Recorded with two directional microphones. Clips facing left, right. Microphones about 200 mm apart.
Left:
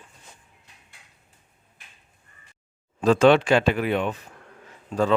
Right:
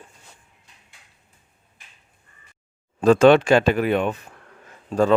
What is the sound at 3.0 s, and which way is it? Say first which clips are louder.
Speech: right 3 dB; 50° right (ahead or behind).